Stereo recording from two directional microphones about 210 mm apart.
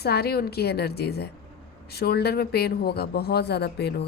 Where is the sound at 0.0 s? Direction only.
50° left (ahead or behind).